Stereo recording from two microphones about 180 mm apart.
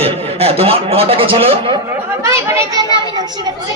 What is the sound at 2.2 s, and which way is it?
Speech, 15° right (ahead or behind).